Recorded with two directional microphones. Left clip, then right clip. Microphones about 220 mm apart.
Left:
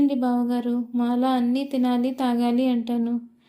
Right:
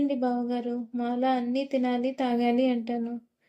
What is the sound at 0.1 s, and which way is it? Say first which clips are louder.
A woman's voice: left 4 dB; 25° left (ahead or behind).